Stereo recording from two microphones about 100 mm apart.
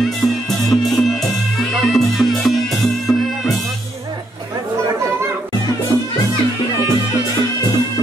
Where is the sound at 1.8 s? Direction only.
Centre (ahead or behind).